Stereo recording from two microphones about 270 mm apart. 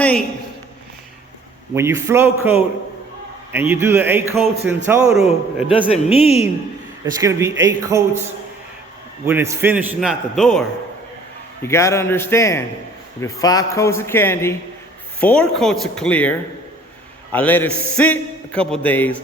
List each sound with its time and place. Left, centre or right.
0.0 s a man's voice: centre
1.7 s a man's voice: centre
5.9 s a woman's voice: left
7.0 s a man's voice: centre
9.2 s a man's voice: centre
11.6 s a man's voice: centre